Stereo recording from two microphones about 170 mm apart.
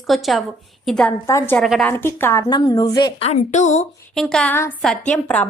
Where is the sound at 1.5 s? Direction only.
Centre (ahead or behind).